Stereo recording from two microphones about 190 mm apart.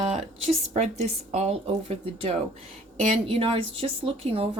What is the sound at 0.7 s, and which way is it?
A woman's voice, 35° right (ahead or behind).